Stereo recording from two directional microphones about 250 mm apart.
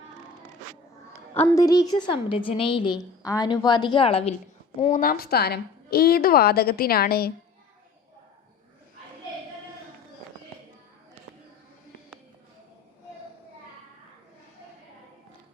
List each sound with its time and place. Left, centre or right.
1.3 s a woman's voice: centre; by 7.3 s left